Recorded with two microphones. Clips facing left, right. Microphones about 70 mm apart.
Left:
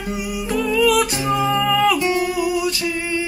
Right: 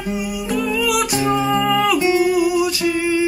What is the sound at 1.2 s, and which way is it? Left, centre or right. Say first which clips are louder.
Music: right 1 dB; right.